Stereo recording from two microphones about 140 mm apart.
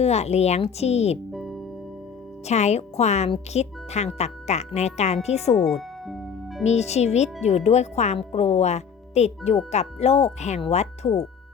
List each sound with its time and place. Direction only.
0.0 s speech: 50° left (ahead or behind)
1.3 s music: centre (ahead or behind)
2.5 s speech: 50° left (ahead or behind)
5.6 s music: centre (ahead or behind)
6.7 s speech: 50° left (ahead or behind)